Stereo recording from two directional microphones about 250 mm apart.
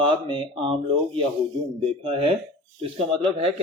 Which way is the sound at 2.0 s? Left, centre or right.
Right.